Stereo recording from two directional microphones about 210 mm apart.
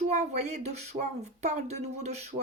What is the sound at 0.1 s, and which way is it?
Speech, 35° right (ahead or behind).